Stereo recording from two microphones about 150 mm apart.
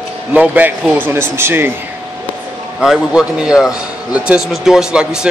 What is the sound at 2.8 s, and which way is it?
A man's voice, 5° right (ahead or behind).